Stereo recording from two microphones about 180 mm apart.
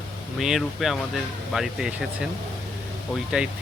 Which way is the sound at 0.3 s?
Centre (ahead or behind).